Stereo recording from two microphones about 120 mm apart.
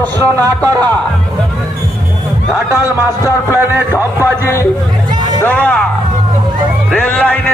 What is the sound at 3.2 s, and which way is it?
A man's voice, 20° right (ahead or behind).